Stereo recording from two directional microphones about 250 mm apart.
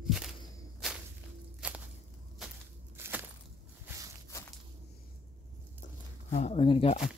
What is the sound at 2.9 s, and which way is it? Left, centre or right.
Walk, centre.